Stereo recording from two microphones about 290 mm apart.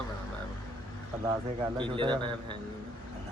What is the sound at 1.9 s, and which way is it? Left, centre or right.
Speech, centre.